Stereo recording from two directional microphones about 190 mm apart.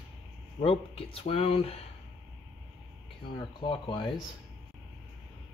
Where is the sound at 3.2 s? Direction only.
25° left (ahead or behind).